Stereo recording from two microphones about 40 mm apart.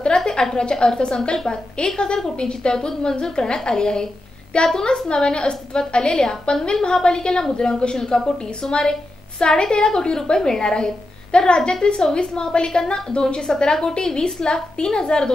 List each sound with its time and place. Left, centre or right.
0.0 s a woman's voice: left